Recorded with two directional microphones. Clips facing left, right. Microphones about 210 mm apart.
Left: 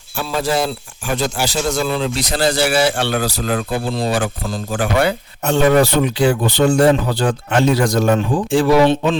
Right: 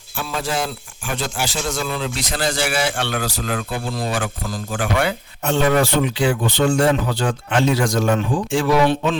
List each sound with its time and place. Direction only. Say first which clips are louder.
0.2 s a man's voice: left 5 dB; 35° left (ahead or behind)